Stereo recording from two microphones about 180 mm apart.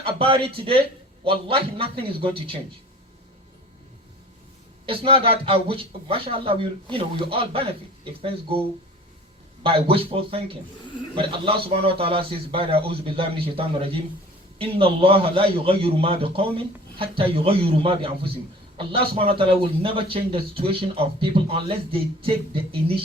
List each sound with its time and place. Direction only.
0.0 s speech: 30° right (ahead or behind)
4.9 s speech: 30° right (ahead or behind)
9.6 s speech: 30° right (ahead or behind)